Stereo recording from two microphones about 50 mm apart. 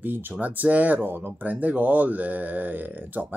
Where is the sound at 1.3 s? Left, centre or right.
Right.